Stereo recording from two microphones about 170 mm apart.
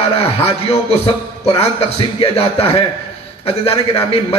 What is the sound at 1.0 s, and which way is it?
A man's voice, 35° left (ahead or behind).